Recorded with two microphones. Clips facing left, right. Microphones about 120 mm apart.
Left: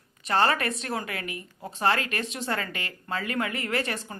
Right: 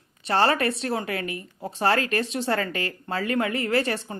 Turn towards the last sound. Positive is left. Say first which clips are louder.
# right 5 dB
turn(degrees=-30)  # may be behind; listen again after turning